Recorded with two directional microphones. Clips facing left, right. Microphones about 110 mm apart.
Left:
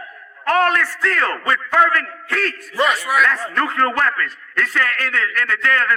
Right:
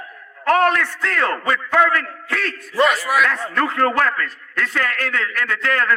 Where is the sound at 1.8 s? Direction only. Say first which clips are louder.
Left 1 dB; 30° left (ahead or behind).